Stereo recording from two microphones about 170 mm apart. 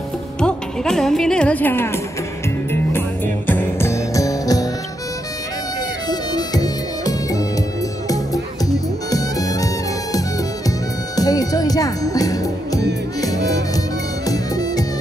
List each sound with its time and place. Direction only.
0.4 s speech: 5° left (ahead or behind)
3.4 s music: 10° left (ahead or behind)
6.0 s music: 25° left (ahead or behind)
11.1 s music: 20° left (ahead or behind)